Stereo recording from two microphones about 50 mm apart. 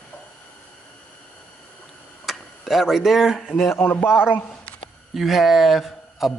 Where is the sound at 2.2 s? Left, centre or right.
Centre.